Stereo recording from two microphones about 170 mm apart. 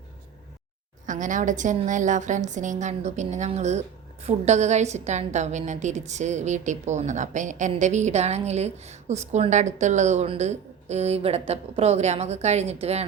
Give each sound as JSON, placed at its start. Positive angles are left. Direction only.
{"t": 1.0, "sound": "a woman's voice", "side_deg": -50}